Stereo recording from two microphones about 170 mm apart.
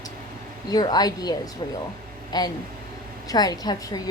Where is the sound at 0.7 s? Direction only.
25° left (ahead or behind).